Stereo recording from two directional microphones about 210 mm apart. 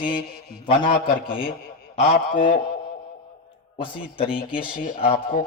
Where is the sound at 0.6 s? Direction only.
25° left (ahead or behind).